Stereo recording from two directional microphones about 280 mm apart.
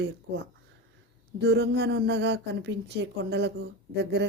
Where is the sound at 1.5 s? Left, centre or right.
Right.